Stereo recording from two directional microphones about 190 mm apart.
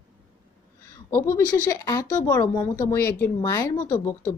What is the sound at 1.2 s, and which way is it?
Speech, 15° left (ahead or behind).